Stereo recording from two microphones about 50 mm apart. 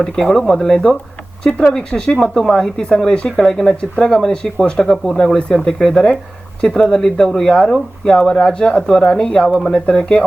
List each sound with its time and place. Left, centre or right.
0.0 s speech: centre
9.8 s speech: centre